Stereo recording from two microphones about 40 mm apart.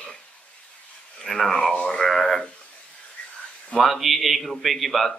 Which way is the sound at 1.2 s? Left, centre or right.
Centre.